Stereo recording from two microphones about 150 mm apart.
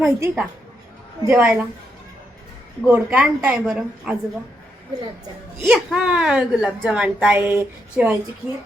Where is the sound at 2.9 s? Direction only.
10° right (ahead or behind).